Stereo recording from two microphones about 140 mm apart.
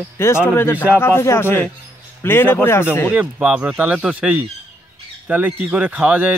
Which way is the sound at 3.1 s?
10° right (ahead or behind).